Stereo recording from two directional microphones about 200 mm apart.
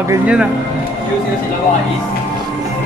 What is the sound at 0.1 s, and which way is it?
Speech, 5° right (ahead or behind).